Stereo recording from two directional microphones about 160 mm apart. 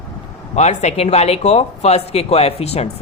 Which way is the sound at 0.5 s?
45° left (ahead or behind).